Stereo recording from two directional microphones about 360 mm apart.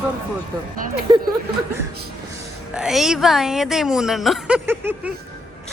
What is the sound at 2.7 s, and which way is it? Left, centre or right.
A woman's voice, centre.